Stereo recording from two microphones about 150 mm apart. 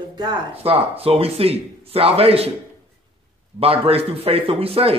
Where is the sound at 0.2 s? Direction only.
30° right (ahead or behind).